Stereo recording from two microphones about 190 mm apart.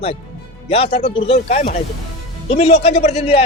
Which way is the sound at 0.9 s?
30° left (ahead or behind).